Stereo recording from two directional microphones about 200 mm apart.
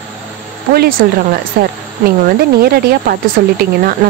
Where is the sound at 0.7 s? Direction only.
45° right (ahead or behind).